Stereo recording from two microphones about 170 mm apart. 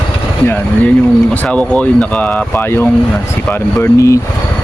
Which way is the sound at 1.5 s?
5° left (ahead or behind).